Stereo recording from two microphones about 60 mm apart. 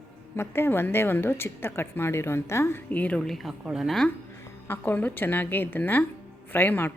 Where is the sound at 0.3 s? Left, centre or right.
Left.